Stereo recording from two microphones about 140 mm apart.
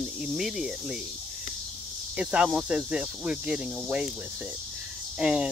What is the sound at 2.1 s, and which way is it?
Speech, 5° right (ahead or behind).